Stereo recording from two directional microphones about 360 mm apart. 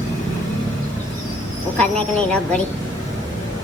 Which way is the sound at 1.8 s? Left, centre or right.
Centre.